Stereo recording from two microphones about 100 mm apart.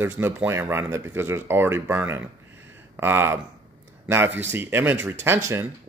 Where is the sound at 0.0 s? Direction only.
20° right (ahead or behind).